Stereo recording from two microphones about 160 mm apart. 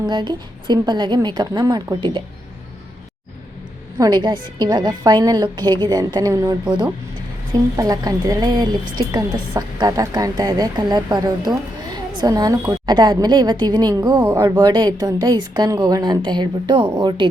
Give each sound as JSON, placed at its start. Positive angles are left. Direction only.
{"t": 0.1, "sound": "a woman's voice", "side_deg": -25}
{"t": 3.9, "sound": "a woman's voice", "side_deg": -25}
{"t": 7.8, "sound": "a woman's voice", "side_deg": -20}